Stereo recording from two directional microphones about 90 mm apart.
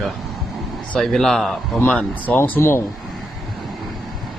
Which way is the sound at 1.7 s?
15° left (ahead or behind).